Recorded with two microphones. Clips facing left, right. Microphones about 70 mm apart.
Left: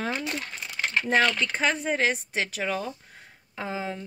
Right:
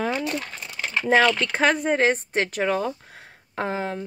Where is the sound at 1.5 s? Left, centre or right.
Right.